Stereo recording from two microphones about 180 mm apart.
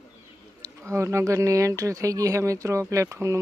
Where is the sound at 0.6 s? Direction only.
15° right (ahead or behind).